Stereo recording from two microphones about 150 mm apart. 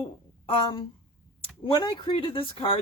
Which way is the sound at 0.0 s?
35° left (ahead or behind).